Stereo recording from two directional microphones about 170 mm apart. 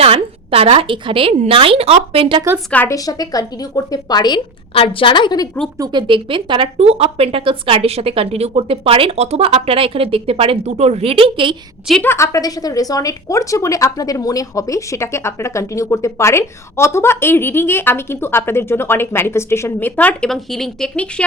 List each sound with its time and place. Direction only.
0.0 s speech: 35° right (ahead or behind)
2.6 s a woman's voice: 10° left (ahead or behind)
5.7 s speech: 25° right (ahead or behind)
12.0 s a woman's voice: 15° left (ahead or behind)